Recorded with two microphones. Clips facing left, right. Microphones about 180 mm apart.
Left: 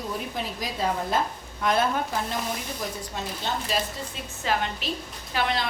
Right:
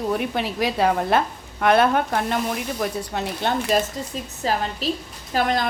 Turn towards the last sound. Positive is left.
turn(degrees=-45)  # may be behind; listen again after turning